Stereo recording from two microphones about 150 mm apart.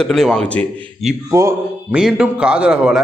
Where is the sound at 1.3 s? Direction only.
20° right (ahead or behind).